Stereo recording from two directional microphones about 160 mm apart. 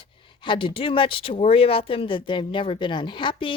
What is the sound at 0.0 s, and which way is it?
A woman's voice, 30° left (ahead or behind).